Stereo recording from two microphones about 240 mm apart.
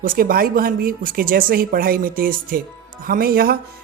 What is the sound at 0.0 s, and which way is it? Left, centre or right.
Speech, right.